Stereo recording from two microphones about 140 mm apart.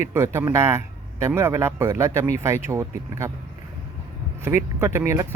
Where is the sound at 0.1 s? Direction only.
20° right (ahead or behind).